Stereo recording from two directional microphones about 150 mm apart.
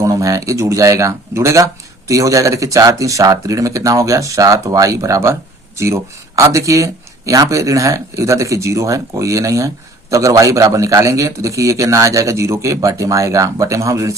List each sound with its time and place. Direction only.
0.0 s speech: 20° right (ahead or behind)